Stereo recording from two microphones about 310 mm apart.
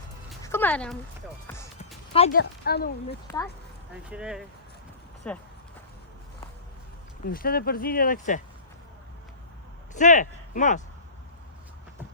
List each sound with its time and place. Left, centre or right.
0.4 s a sound: centre
2.1 s speech: centre
2.4 s a woman's voice: left
3.1 s speech: centre
4.1 s speech: centre
7.3 s speech: left
9.9 s speech: left